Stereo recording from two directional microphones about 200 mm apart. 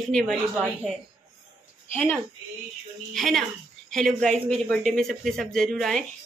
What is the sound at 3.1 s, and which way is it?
Speech, centre (ahead or behind).